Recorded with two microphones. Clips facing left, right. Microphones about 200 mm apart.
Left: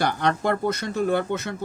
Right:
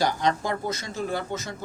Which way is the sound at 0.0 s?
60° left (ahead or behind).